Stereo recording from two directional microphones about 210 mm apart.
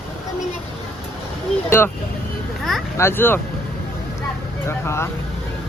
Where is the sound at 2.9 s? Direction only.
10° left (ahead or behind).